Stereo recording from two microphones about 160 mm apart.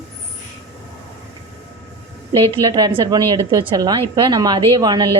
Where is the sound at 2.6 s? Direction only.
25° right (ahead or behind).